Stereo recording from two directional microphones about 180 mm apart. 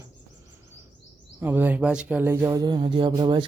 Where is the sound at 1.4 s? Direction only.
10° right (ahead or behind).